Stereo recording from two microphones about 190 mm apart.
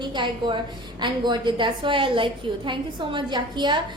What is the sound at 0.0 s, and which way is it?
A woman's voice, 25° right (ahead or behind).